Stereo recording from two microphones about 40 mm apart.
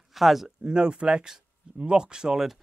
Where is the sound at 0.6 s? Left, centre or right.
Right.